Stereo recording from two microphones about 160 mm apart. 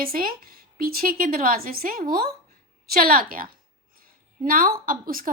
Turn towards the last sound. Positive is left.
turn(degrees=-60)  # may be behind; listen again after turning